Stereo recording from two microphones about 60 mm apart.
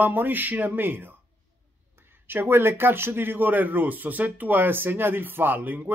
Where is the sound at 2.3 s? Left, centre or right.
Right.